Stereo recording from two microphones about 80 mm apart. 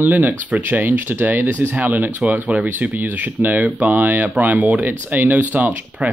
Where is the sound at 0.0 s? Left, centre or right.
Right.